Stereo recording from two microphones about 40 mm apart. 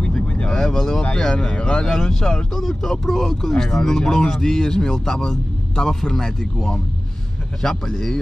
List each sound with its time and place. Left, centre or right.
0.3 s vehicle: left
0.6 s vehicle: centre
1.1 s speech: left